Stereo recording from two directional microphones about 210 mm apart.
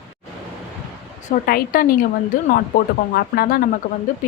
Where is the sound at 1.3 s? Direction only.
45° left (ahead or behind).